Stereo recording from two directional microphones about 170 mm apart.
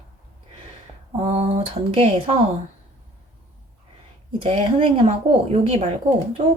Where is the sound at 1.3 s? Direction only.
30° right (ahead or behind).